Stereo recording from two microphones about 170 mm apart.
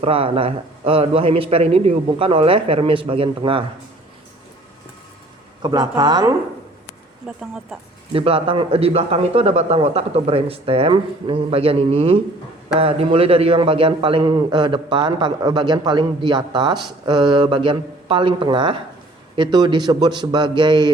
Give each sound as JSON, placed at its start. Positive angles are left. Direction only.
{"t": 0.0, "sound": "speech", "side_deg": -35}
{"t": 5.6, "sound": "a man's voice", "side_deg": -25}
{"t": 7.3, "sound": "speech", "side_deg": -5}
{"t": 8.1, "sound": "a man's voice", "side_deg": -35}